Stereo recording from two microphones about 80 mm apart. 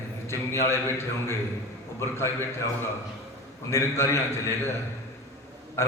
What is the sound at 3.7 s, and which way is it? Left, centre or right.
A man's voice, left.